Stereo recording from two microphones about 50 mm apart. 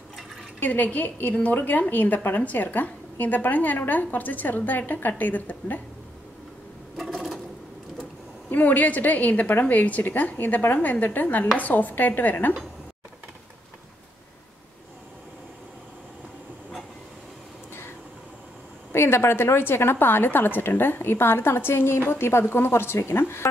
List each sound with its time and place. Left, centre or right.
0.6 s a woman's voice: left
8.5 s a woman's voice: left
18.9 s a woman's voice: left